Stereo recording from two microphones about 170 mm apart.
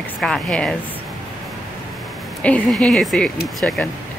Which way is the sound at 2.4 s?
5° left (ahead or behind).